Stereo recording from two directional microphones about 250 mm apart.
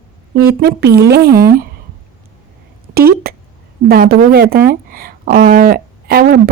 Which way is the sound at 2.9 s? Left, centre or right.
Right.